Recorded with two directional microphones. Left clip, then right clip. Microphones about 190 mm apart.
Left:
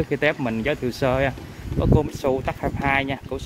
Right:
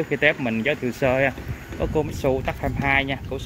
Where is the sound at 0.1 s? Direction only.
20° left (ahead or behind).